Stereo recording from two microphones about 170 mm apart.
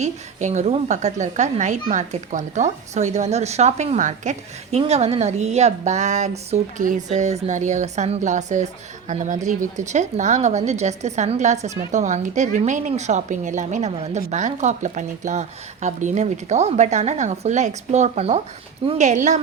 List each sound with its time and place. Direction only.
0.0 s a woman's voice: 45° right (ahead or behind)